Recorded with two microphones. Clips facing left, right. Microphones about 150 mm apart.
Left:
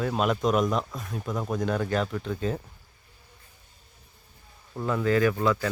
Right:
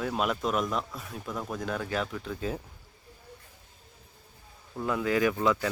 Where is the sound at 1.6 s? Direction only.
Centre (ahead or behind).